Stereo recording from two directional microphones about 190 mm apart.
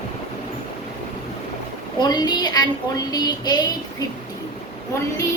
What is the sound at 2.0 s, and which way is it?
A woman's voice, 20° left (ahead or behind).